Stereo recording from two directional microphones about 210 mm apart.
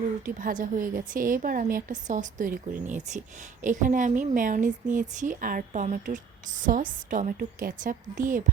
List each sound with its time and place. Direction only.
0.3 s a woman's voice: 40° right (ahead or behind)